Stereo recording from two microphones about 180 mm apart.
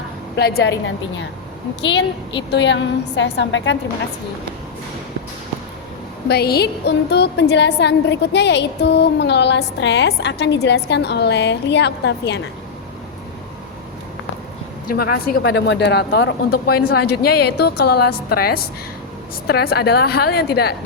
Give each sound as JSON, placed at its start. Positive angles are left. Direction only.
{"t": 0.3, "sound": "a woman's voice", "side_deg": 60}
{"t": 1.8, "sound": "a woman's voice", "side_deg": 80}
{"t": 6.2, "sound": "a woman's voice", "side_deg": 60}
{"t": 14.8, "sound": "speech", "side_deg": 55}